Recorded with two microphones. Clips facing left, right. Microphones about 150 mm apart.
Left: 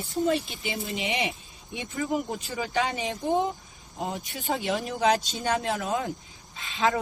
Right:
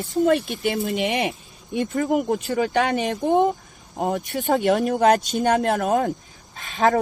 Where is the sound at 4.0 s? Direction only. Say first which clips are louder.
Right 9 dB; 60° right (ahead or behind).